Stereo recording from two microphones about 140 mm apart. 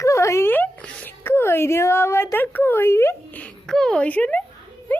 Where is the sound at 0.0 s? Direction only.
20° left (ahead or behind).